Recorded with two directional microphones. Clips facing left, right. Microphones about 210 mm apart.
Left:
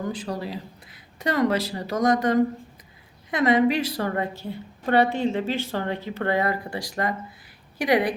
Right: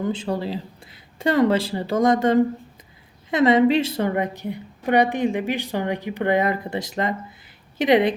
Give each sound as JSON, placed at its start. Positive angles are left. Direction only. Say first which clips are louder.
{"t": 0.0, "sound": "a woman's voice", "louder": "right 5 dB", "side_deg": -25}